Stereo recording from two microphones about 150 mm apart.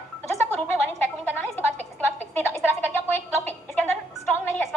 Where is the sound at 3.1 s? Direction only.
10° left (ahead or behind).